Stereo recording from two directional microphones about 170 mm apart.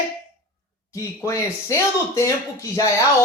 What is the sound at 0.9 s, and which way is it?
A man's voice, 20° left (ahead or behind).